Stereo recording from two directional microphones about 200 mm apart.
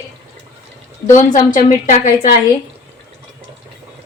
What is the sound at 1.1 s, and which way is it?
Speech, 40° left (ahead or behind).